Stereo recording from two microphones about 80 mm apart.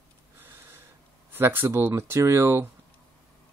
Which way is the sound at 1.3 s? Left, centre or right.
Right.